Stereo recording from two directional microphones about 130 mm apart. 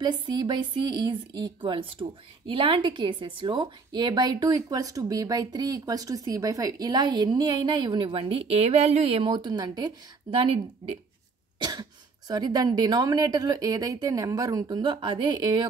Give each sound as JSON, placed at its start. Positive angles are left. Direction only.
{"t": 0.0, "sound": "a woman's voice", "side_deg": -35}